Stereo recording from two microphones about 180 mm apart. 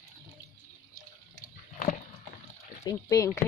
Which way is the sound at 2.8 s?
20° left (ahead or behind).